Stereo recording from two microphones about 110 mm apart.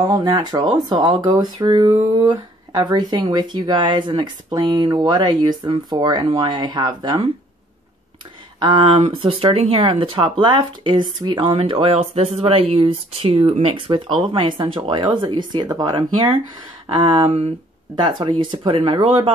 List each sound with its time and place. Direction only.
0.1 s speech: 35° right (ahead or behind)
8.5 s speech: 50° right (ahead or behind)
11.5 s speech: 60° right (ahead or behind); by 16.3 s 45° right (ahead or behind)
17.0 s speech: 55° right (ahead or behind)
17.9 s speech: 45° right (ahead or behind)